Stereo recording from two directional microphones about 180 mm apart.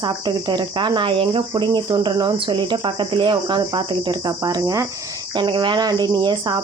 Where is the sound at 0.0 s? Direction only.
25° right (ahead or behind).